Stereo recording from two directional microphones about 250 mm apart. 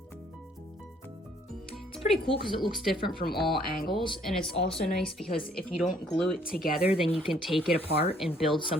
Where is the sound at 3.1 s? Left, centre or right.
Left.